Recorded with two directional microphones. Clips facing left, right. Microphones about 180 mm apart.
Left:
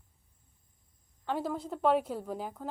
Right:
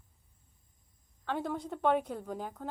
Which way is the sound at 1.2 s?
5° left (ahead or behind).